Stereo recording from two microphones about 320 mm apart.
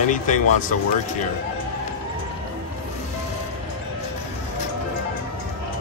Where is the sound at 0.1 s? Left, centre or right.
Left.